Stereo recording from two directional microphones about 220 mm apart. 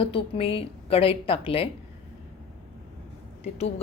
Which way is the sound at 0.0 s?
25° left (ahead or behind).